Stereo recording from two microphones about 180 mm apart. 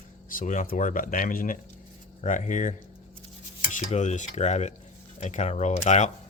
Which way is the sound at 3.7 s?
40° left (ahead or behind).